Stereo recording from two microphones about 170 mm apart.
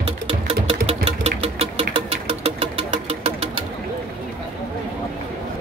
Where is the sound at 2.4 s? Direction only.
35° right (ahead or behind).